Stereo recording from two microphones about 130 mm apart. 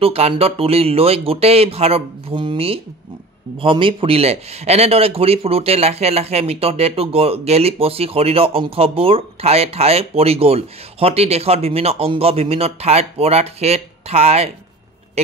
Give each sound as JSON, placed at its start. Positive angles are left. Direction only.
{"t": 0.0, "sound": "a man's voice", "side_deg": -50}